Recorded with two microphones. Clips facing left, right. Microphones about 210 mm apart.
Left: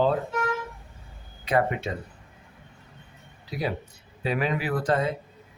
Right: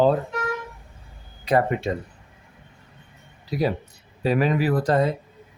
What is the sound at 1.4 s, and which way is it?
Speech, 40° right (ahead or behind).